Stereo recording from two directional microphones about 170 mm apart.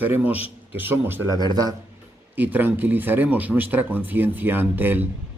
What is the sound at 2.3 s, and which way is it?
Speech, 10° right (ahead or behind).